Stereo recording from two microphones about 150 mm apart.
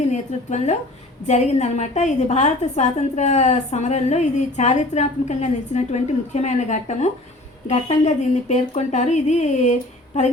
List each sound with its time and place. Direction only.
0.1 s a woman's voice: 50° left (ahead or behind)